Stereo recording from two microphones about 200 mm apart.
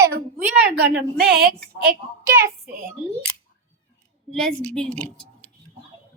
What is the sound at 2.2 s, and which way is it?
Speech, 15° right (ahead or behind).